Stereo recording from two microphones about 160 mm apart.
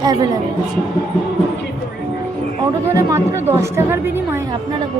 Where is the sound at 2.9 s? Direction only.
20° right (ahead or behind).